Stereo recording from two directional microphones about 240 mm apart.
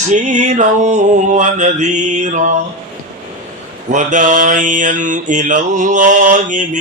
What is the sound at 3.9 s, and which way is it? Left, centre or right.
Mantra, right.